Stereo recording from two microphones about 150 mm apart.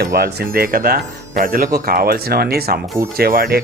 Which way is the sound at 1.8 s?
90° right.